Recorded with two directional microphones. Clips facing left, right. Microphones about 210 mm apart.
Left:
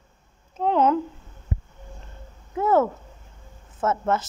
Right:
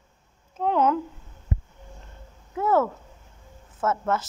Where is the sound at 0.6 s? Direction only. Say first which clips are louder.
Left 2 dB; 25° left (ahead or behind).